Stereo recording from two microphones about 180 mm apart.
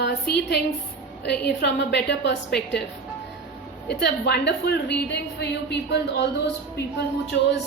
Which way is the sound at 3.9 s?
65° left (ahead or behind).